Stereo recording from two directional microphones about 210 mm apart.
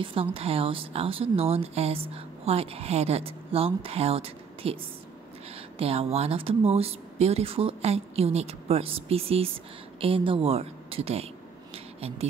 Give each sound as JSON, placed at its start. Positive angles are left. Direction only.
{"t": 0.0, "sound": "speech", "side_deg": -25}
{"t": 5.8, "sound": "speech", "side_deg": -30}
{"t": 11.7, "sound": "a sound", "side_deg": -30}